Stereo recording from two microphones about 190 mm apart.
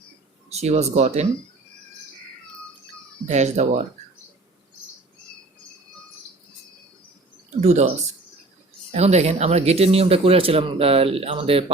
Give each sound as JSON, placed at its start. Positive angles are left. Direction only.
{"t": 0.5, "sound": "speech", "side_deg": -35}
{"t": 3.2, "sound": "speech", "side_deg": -35}
{"t": 7.6, "sound": "speech", "side_deg": -35}
{"t": 8.9, "sound": "speech", "side_deg": -35}